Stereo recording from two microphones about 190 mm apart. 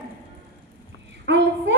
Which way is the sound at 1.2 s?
65° right (ahead or behind).